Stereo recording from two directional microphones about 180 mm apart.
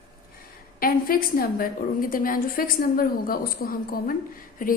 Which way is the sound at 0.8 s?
55° left (ahead or behind).